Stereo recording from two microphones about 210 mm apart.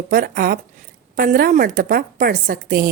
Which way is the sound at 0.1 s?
45° right (ahead or behind).